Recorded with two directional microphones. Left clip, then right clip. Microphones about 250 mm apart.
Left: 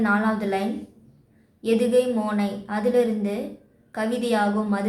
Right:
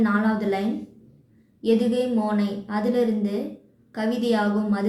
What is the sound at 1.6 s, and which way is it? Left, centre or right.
Speech, centre.